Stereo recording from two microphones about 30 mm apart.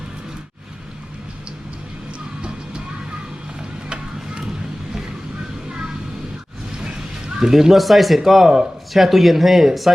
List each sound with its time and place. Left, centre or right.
3.8 s a sound: right
7.3 s speech: centre
7.7 s speech: centre